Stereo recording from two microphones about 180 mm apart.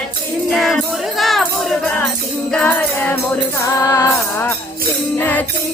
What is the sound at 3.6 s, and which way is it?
Music, 15° left (ahead or behind).